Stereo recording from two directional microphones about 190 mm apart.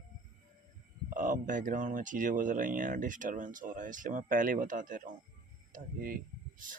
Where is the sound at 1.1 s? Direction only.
45° right (ahead or behind).